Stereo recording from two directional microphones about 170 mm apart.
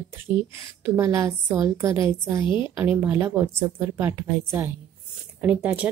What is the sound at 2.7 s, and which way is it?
Speech, 10° right (ahead or behind).